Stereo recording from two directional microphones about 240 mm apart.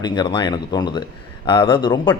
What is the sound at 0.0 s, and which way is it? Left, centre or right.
A man's voice, centre.